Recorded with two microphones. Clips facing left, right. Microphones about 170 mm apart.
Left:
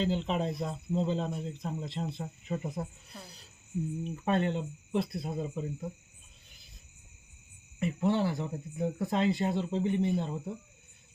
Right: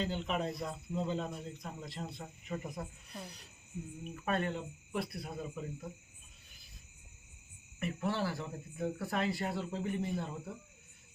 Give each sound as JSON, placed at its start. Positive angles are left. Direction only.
{"t": 0.0, "sound": "speech", "side_deg": 30}
{"t": 7.8, "sound": "speech", "side_deg": 20}